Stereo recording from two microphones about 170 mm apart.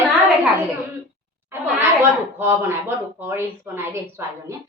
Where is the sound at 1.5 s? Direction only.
10° right (ahead or behind).